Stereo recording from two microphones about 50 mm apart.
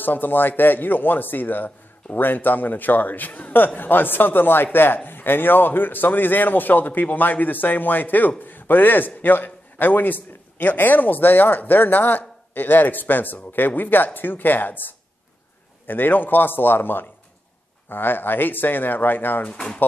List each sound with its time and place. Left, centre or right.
0.0 s a man's voice: left
19.5 s speech: centre